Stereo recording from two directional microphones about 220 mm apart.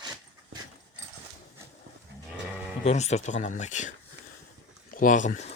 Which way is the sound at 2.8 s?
30° left (ahead or behind).